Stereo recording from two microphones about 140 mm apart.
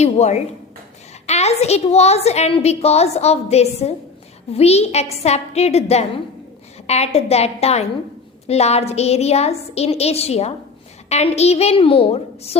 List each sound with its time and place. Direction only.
0.0 s a woman's voice: 55° left (ahead or behind)